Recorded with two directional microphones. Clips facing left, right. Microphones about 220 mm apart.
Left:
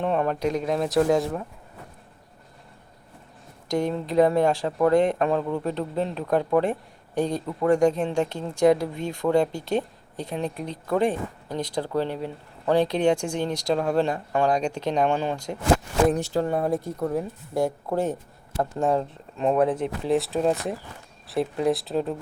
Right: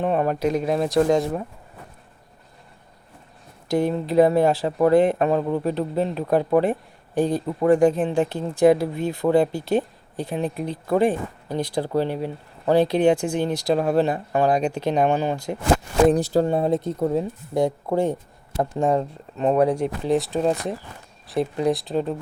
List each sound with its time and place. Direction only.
0.0 s speech: 5° right (ahead or behind)
3.7 s speech: 5° right (ahead or behind)
5.4 s speech: 20° right (ahead or behind)
5.6 s speech: 5° right (ahead or behind)
16.0 s speech: 35° right (ahead or behind); by 18.7 s 15° right (ahead or behind)
18.8 s speech: centre (ahead or behind)